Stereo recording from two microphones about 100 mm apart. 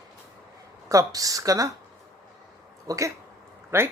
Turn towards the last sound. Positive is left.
turn(degrees=-25)  # may be behind; listen again after turning